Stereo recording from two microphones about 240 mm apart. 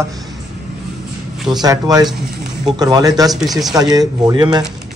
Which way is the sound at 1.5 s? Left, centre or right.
Centre.